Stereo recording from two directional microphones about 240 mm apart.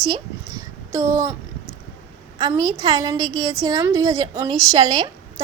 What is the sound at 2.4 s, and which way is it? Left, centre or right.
A woman's voice, centre.